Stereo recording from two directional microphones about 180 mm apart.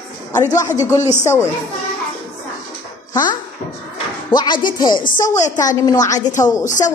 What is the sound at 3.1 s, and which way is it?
Speech, 25° left (ahead or behind).